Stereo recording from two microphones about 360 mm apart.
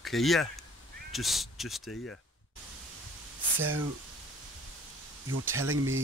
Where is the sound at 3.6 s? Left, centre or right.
Right.